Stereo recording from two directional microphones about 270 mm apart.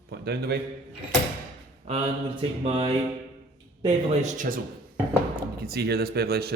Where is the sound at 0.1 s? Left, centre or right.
Right.